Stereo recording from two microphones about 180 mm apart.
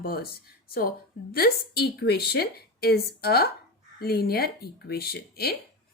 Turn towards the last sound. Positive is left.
turn(degrees=60)  # may be behind; listen again after turning